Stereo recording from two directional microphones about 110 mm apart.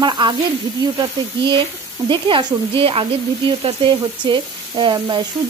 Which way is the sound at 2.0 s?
45° right (ahead or behind).